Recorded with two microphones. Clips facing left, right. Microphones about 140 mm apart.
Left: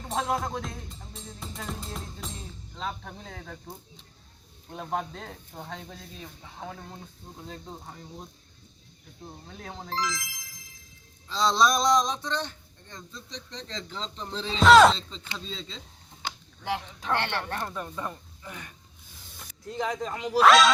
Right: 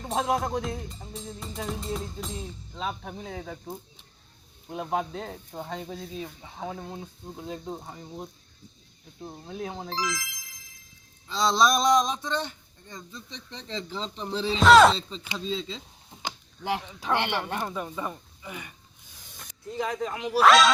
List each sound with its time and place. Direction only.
0.1 s speech: centre (ahead or behind)
2.7 s speech: 10° right (ahead or behind)
9.9 s speech: centre (ahead or behind)
11.3 s speech: 5° right (ahead or behind)
15.1 s speech: 15° right (ahead or behind)
16.2 s a sound: 15° right (ahead or behind)
17.0 s speech: 10° right (ahead or behind)